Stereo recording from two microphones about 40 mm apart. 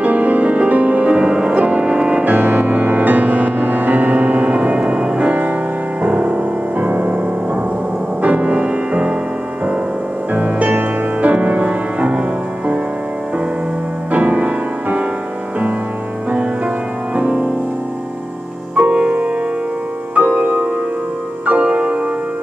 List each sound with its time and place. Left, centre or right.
0.0 s music: right
2.2 s music: right
8.2 s music: right
10.3 s music: right
14.1 s music: right
17.1 s music: right
18.8 s music: right